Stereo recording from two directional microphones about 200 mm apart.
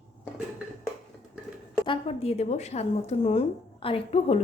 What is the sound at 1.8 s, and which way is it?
A woman's voice, 25° left (ahead or behind).